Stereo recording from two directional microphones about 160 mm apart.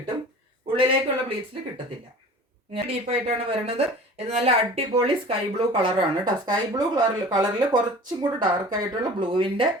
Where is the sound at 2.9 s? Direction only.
40° right (ahead or behind).